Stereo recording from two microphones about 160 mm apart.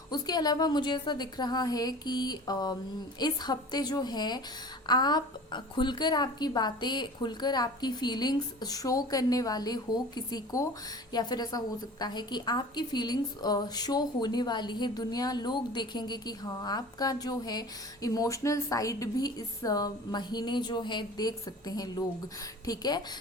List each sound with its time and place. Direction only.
0.1 s a woman's voice: 25° left (ahead or behind)